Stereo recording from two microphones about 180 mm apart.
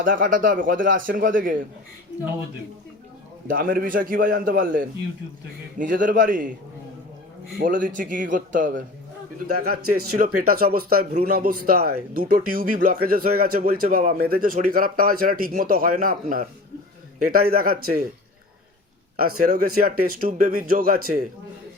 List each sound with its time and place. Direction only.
0.0 s a man's voice: 50° right (ahead or behind)
3.4 s a man's voice: 50° right (ahead or behind)
7.6 s a man's voice: 50° right (ahead or behind)
9.5 s a man's voice: 60° right (ahead or behind)
19.1 s a man's voice: 50° right (ahead or behind)